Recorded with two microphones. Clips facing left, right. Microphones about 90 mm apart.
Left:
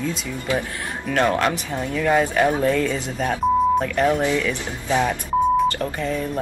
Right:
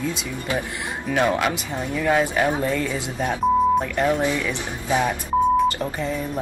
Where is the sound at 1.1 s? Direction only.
10° right (ahead or behind).